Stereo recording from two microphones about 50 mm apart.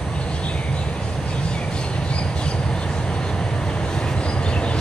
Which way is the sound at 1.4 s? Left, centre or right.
Left.